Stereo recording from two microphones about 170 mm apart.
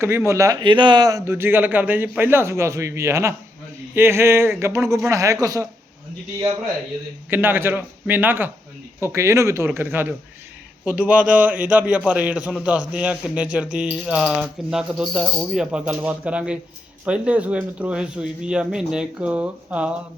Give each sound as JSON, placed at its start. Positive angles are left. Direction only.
{"t": 0.0, "sound": "a man's voice", "side_deg": -15}
{"t": 7.3, "sound": "a man's voice", "side_deg": -10}